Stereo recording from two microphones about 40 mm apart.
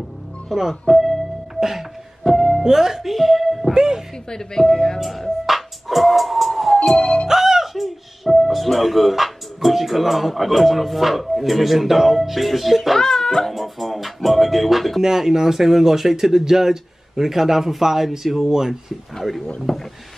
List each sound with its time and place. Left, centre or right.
0.5 s music: centre
2.6 s speech: centre
3.7 s speech: centre
4.3 s speech: centre
5.0 s music: centre
7.0 s music: left
7.2 s speech: centre
13.0 s a child's voice: centre
13.6 s music: centre
15.0 s speech: centre